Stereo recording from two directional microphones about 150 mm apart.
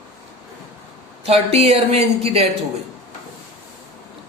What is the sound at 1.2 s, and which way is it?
Speech, 45° right (ahead or behind).